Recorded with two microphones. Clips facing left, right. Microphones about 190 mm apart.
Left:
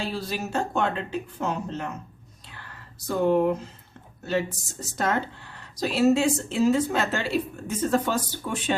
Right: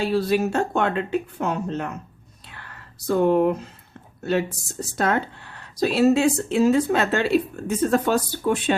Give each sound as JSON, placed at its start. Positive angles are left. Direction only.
{"t": 0.0, "sound": "speech", "side_deg": -60}
{"t": 2.5, "sound": "a sound", "side_deg": -60}
{"t": 4.2, "sound": "speech", "side_deg": -60}